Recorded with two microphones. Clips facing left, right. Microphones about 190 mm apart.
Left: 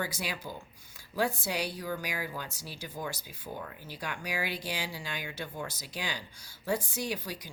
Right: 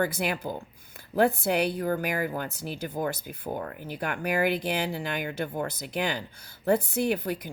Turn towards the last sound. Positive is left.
turn(degrees=-60)  # may be behind; listen again after turning